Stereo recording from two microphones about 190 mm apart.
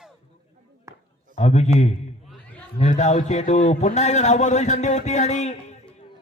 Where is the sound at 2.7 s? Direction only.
40° left (ahead or behind).